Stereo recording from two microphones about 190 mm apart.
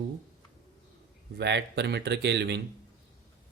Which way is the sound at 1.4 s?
65° right (ahead or behind).